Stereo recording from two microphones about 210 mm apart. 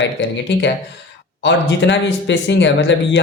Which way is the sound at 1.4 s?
55° left (ahead or behind).